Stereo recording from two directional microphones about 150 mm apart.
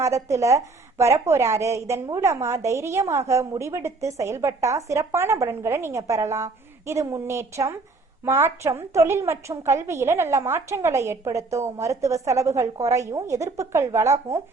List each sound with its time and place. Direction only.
0.0 s a woman's voice: 20° right (ahead or behind)